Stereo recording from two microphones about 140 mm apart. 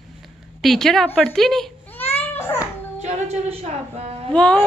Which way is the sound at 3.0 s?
50° right (ahead or behind).